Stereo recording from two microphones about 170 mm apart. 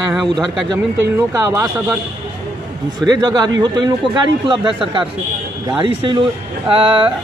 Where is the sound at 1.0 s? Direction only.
20° right (ahead or behind).